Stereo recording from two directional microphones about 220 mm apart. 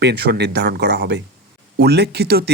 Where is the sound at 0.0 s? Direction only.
50° right (ahead or behind).